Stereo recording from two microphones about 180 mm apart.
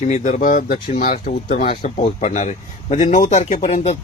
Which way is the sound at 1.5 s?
35° left (ahead or behind).